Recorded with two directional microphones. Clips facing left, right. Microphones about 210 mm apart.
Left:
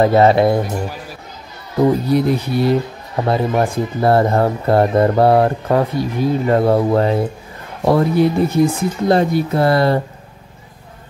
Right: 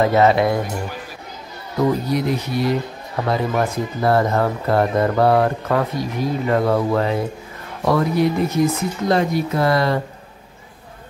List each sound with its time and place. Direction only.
0.0 s speech: 30° left (ahead or behind)
1.8 s speech: 30° left (ahead or behind)